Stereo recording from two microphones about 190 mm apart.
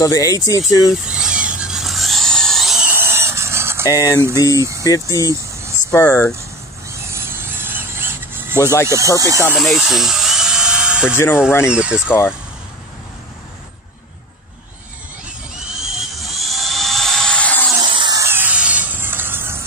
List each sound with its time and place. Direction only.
0.0 s speech: 20° left (ahead or behind)
1.0 s a sound: 5° right (ahead or behind)
3.9 s speech: 15° left (ahead or behind)
6.9 s mechanisms: 15° right (ahead or behind)
8.8 s speech: 15° right (ahead or behind)
9.5 s electric toothbrush: centre (ahead or behind)
11.1 s speech: 15° left (ahead or behind)
11.7 s speech: 5° right (ahead or behind)
12.1 s speech: 10° left (ahead or behind)
15.9 s helicopter: centre (ahead or behind)
17.7 s a sound: 25° right (ahead or behind)